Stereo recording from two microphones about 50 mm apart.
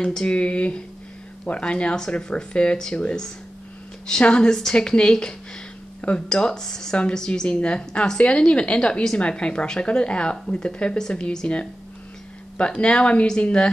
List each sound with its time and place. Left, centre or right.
0.0 s a woman's voice: centre